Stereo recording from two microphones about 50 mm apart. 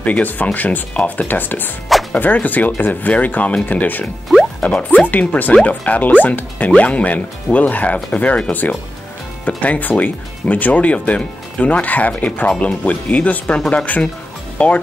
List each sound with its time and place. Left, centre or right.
0.0 s speech: left
4.6 s speech: left